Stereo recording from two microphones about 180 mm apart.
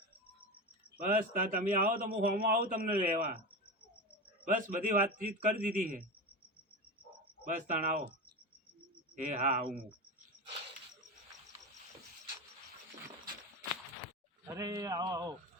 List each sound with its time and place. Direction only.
0.9 s a man's voice: 50° right (ahead or behind)
4.4 s a man's voice: 45° right (ahead or behind)
7.4 s a man's voice: 45° right (ahead or behind)
9.1 s a man's voice: 45° right (ahead or behind)
14.4 s a sound: 20° right (ahead or behind)